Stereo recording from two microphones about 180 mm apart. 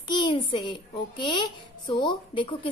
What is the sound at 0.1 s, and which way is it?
A woman's voice, 25° left (ahead or behind).